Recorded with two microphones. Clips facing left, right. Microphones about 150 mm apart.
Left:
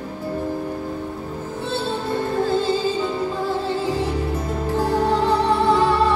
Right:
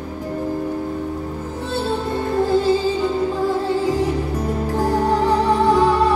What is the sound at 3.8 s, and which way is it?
Music, 10° right (ahead or behind).